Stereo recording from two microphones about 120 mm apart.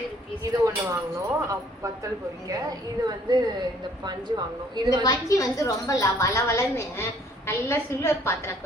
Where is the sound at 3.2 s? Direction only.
35° right (ahead or behind).